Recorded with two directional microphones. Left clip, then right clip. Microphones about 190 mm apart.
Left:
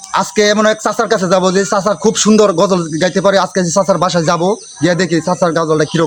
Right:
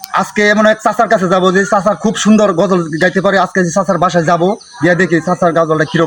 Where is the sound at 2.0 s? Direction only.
25° left (ahead or behind).